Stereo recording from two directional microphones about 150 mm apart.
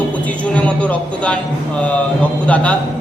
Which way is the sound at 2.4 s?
10° left (ahead or behind).